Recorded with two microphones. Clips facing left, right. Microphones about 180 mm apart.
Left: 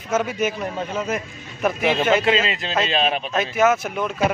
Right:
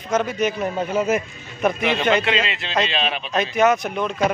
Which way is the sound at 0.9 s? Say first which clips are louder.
Right 5 dB; 5° right (ahead or behind).